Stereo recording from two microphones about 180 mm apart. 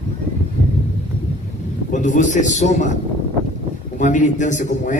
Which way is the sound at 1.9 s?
45° left (ahead or behind).